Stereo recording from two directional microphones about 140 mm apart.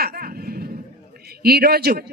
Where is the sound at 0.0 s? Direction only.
90° right.